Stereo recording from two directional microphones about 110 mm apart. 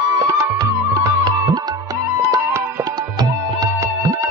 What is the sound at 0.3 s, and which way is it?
Music, 30° right (ahead or behind).